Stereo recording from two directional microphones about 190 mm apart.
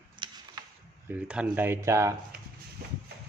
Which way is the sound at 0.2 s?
25° right (ahead or behind).